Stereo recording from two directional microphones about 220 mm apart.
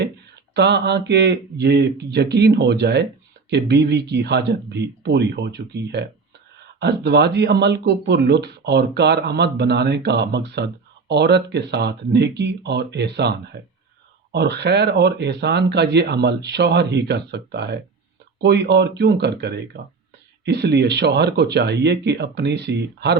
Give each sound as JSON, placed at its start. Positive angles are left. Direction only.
{"t": 0.5, "sound": "speech", "side_deg": -50}